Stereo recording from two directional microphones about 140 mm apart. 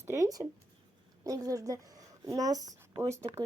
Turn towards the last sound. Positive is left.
turn(degrees=-20)  # may be behind; listen again after turning